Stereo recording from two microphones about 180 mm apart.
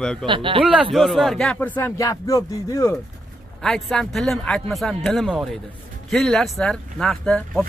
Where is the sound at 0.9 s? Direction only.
Centre (ahead or behind).